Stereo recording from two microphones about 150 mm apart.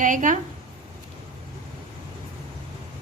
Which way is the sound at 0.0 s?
60° right (ahead or behind).